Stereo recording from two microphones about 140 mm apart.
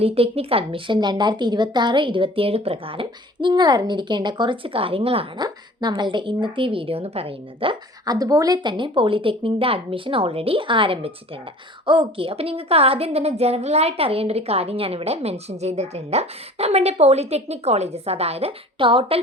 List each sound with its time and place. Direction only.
0.0 s a woman's voice: 45° right (ahead or behind)